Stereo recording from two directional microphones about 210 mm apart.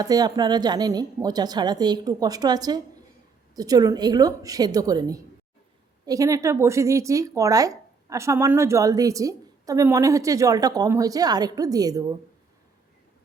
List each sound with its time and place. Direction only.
0.0 s a woman's voice: 20° right (ahead or behind)